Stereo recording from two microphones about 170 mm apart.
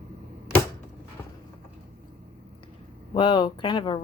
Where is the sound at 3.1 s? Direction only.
25° left (ahead or behind).